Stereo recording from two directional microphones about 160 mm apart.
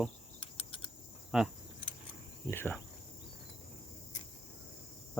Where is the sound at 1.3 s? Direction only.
5° right (ahead or behind).